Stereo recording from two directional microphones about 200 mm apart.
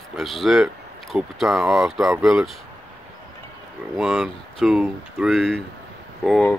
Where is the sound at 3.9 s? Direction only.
5° right (ahead or behind).